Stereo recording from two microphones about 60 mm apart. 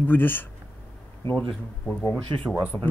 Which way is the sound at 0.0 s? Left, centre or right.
Left.